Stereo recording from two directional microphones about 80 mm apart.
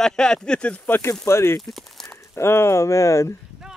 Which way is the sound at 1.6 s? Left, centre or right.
Centre.